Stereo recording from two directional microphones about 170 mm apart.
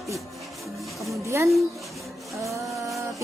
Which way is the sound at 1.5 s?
Centre (ahead or behind).